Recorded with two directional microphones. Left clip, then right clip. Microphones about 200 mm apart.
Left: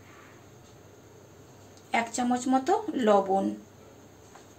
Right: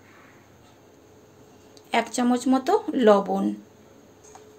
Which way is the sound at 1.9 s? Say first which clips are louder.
Right 4 dB; 45° right (ahead or behind).